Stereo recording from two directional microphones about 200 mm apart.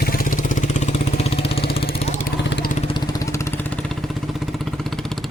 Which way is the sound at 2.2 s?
45° left (ahead or behind).